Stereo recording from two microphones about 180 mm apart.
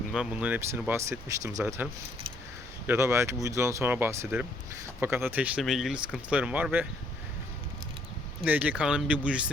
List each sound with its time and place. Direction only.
0.1 s speech: 5° right (ahead or behind)
2.8 s speech: 15° right (ahead or behind)
8.4 s speech: 10° right (ahead or behind)